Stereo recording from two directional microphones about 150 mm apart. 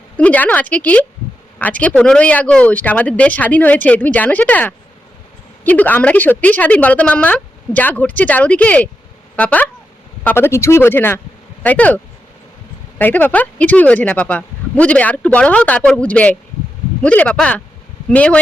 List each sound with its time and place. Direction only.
0.2 s speech: 10° left (ahead or behind)
13.0 s speech: 10° left (ahead or behind)